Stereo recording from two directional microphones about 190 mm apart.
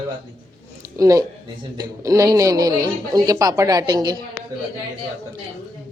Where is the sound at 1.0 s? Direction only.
15° right (ahead or behind).